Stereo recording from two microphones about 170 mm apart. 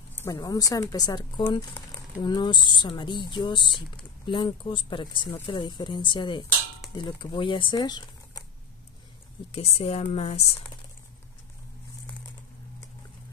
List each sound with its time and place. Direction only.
0.1 s speech: 20° left (ahead or behind)
9.5 s a woman's voice: 35° left (ahead or behind)